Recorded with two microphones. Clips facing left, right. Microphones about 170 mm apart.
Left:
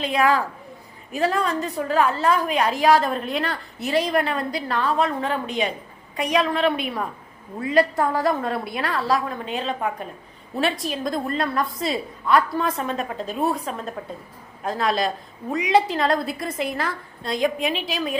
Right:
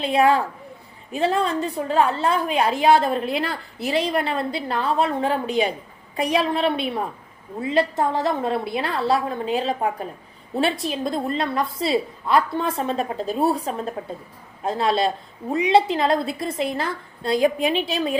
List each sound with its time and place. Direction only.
0.0 s a woman's voice: 30° right (ahead or behind)